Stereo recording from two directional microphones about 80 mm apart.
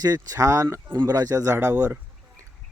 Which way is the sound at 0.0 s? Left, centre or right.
Right.